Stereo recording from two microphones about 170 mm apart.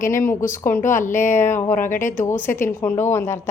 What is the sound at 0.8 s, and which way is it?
Speech, 50° left (ahead or behind).